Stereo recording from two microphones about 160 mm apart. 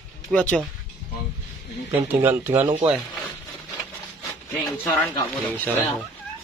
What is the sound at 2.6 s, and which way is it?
Speech, 25° right (ahead or behind).